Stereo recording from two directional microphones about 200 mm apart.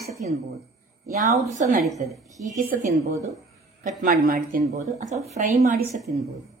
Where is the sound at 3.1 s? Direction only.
15° right (ahead or behind).